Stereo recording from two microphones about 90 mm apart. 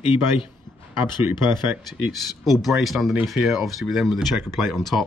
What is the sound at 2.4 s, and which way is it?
Speech, centre (ahead or behind).